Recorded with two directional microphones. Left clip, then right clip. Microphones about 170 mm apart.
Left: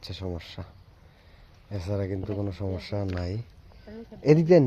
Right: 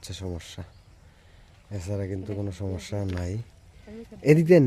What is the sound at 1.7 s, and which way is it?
Speech, 10° right (ahead or behind).